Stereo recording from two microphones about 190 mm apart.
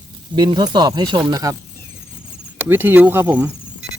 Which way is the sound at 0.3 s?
20° right (ahead or behind).